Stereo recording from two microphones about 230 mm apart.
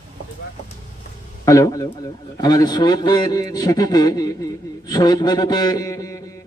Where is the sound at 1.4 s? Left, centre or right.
Centre.